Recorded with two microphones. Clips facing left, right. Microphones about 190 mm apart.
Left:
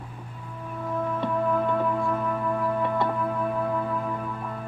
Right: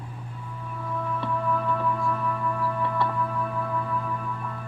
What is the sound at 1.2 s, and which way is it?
Music, 20° left (ahead or behind).